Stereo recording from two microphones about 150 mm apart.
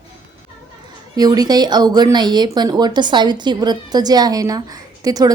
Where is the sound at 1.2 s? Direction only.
25° right (ahead or behind).